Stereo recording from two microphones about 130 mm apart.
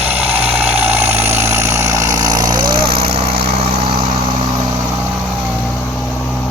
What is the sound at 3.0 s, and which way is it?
Vehicle, 50° right (ahead or behind).